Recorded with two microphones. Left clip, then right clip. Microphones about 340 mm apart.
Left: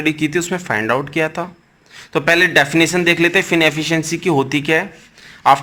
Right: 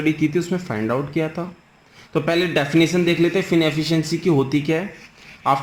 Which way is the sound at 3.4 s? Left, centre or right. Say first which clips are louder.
Left 5 dB; left.